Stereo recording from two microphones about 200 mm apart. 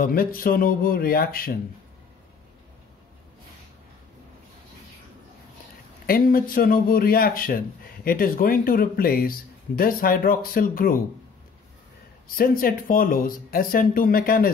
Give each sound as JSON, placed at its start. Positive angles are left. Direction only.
{"t": 0.0, "sound": "a man's voice", "side_deg": 45}
{"t": 6.0, "sound": "a man's voice", "side_deg": 45}
{"t": 12.4, "sound": "a man's voice", "side_deg": 45}